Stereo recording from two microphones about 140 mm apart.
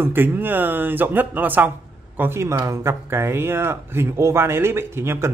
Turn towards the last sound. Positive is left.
turn(degrees=-20)  # may be behind; listen again after turning